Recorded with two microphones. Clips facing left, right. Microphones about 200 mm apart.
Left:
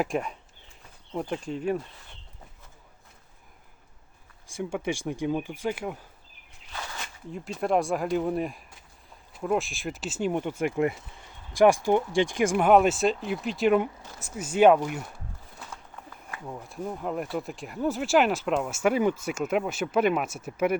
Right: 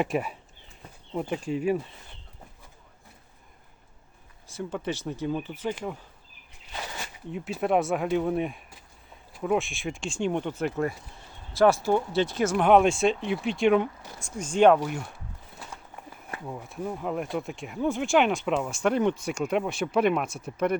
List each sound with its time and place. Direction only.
0.0 s speech: 5° right (ahead or behind)
4.4 s speech: 10° left (ahead or behind)
6.7 s a sound: 20° right (ahead or behind)
7.3 s speech: 5° right (ahead or behind)
16.5 s speech: centre (ahead or behind)